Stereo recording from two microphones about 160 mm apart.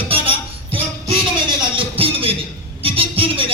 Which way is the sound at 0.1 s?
35° right (ahead or behind).